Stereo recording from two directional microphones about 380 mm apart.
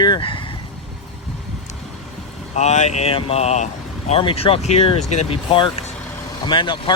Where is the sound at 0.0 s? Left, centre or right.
Centre.